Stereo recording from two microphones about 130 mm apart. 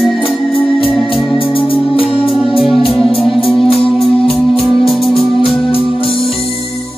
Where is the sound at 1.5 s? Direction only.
45° left (ahead or behind).